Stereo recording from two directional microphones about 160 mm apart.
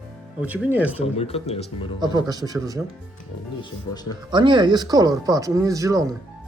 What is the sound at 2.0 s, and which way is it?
Speech, 25° right (ahead or behind).